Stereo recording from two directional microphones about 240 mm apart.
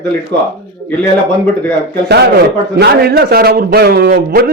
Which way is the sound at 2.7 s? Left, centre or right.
Right.